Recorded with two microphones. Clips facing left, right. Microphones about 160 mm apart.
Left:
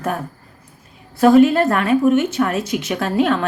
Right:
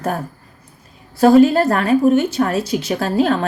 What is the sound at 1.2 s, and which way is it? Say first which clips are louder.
Speech: right 1 dB; 35° right (ahead or behind).